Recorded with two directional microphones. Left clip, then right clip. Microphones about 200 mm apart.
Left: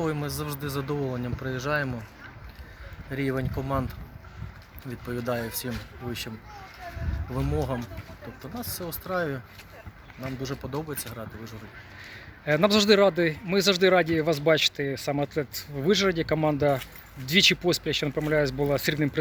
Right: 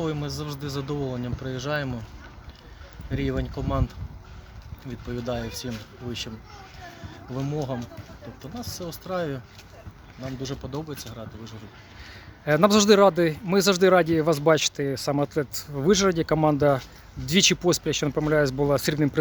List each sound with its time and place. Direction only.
0.0 s speech: 5° right (ahead or behind)
3.1 s speech: 5° right (ahead or behind)
7.3 s speech: 5° left (ahead or behind)
8.5 s speech: 5° right (ahead or behind)
12.1 s a man's voice: 20° right (ahead or behind)